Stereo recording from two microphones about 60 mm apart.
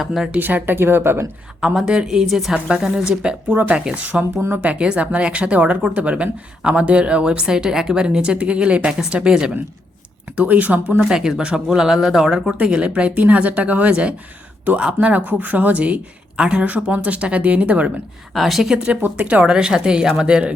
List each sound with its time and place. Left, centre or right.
0.0 s a woman's voice: centre
0.3 s speech: right
1.6 s a woman's voice: centre
2.6 s a woman's voice: centre
3.5 s speech: right
4.4 s speech: right
4.6 s a woman's voice: centre
10.3 s speech: right
11.1 s a woman's voice: centre
16.6 s speech: right
18.3 s a woman's voice: centre
19.0 s a woman's voice: right